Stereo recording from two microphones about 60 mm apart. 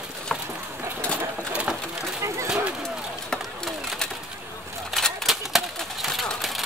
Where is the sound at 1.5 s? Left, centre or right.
Centre.